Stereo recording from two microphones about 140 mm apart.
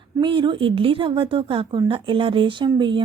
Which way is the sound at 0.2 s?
35° right (ahead or behind).